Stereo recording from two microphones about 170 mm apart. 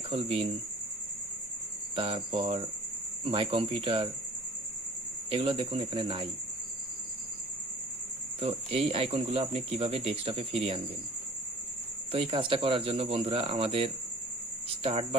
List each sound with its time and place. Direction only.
0.1 s speech: 35° right (ahead or behind)
2.0 s speech: 30° right (ahead or behind)
5.3 s speech: 30° right (ahead or behind)
8.4 s speech: 35° right (ahead or behind)
12.1 s speech: 30° right (ahead or behind)